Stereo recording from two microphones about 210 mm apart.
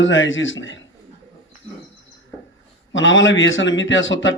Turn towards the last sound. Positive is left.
turn(degrees=60)  # may be behind; listen again after turning